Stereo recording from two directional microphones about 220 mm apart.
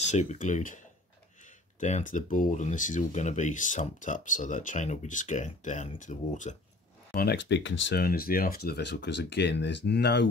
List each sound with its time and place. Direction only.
0.1 s speech: 30° left (ahead or behind)
1.8 s speech: 30° left (ahead or behind)
7.2 s speech: 50° left (ahead or behind)